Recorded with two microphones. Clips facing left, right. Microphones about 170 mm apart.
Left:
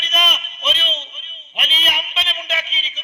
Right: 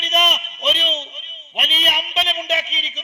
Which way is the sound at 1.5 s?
40° right (ahead or behind).